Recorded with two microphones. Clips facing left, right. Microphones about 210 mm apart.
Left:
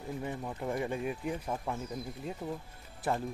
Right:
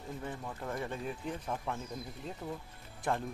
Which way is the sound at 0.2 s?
15° left (ahead or behind).